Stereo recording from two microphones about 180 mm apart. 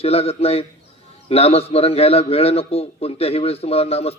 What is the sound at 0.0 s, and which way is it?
Speech, 35° left (ahead or behind).